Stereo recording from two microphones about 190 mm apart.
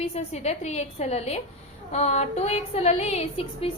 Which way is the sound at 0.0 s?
35° left (ahead or behind).